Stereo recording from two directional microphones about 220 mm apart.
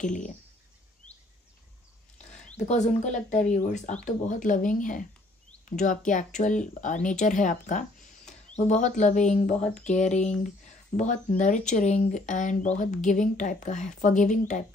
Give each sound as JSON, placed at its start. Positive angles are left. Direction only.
{"t": 0.0, "sound": "speech", "side_deg": 35}
{"t": 2.5, "sound": "speech", "side_deg": 30}